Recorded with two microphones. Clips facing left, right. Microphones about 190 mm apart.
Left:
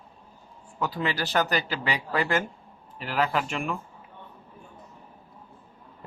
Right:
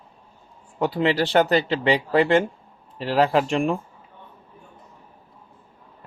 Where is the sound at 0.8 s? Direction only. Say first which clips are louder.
Right 8 dB; 30° right (ahead or behind).